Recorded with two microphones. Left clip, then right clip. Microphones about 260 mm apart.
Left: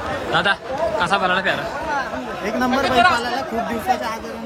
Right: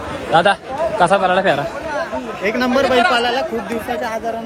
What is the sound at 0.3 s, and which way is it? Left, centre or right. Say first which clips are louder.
Speech: right 6 dB; centre.